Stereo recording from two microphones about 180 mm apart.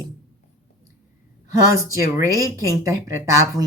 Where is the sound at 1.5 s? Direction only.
20° right (ahead or behind).